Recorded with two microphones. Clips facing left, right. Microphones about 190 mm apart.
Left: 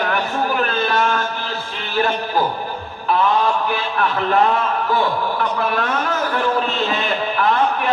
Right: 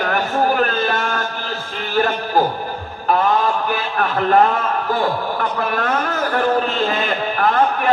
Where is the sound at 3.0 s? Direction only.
45° right (ahead or behind).